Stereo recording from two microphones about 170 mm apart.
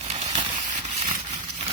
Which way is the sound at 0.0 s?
40° right (ahead or behind).